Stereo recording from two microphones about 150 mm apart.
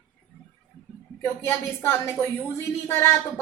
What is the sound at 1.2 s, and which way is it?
A woman's voice, 20° left (ahead or behind).